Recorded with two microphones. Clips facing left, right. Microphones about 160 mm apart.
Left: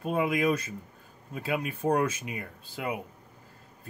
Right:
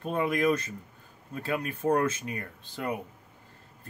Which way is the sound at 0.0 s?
10° left (ahead or behind).